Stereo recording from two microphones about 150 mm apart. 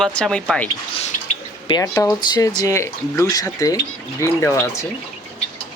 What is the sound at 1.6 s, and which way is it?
Speech, 30° left (ahead or behind).